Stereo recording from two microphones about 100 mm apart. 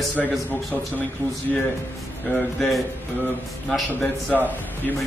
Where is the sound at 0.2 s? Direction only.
Centre (ahead or behind).